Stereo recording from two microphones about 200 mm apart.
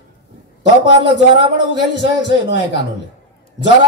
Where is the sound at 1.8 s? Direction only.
60° left (ahead or behind).